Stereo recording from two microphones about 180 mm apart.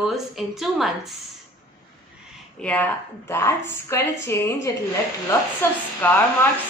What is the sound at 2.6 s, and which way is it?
Speech, 10° left (ahead or behind).